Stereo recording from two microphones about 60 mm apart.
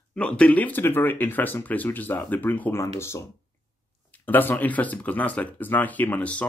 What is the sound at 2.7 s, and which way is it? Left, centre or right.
Speech, left.